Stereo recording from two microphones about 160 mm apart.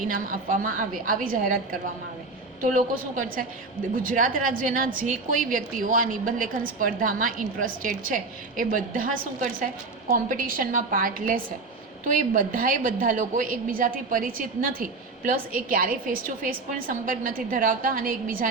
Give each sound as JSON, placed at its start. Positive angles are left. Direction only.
{"t": 0.1, "sound": "a woman's voice", "side_deg": -55}
{"t": 2.6, "sound": "a woman's voice", "side_deg": -55}